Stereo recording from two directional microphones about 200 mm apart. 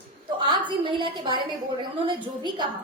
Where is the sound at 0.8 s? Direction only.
25° right (ahead or behind).